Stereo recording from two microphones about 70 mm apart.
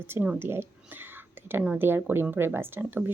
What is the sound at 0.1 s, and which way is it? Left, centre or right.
Speech, right.